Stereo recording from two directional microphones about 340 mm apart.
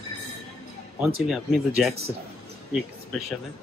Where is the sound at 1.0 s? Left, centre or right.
Centre.